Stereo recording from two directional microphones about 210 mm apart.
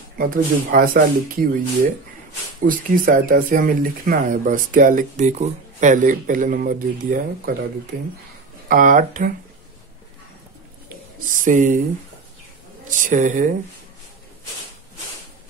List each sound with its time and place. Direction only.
0.2 s speech: 45° right (ahead or behind)
2.6 s speech: 40° right (ahead or behind)
8.6 s speech: 40° right (ahead or behind)
11.1 s speech: 40° right (ahead or behind)
12.8 s speech: 40° right (ahead or behind)